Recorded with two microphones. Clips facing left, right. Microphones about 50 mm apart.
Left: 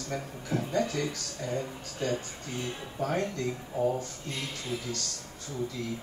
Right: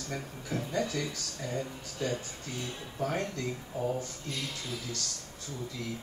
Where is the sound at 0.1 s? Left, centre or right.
Centre.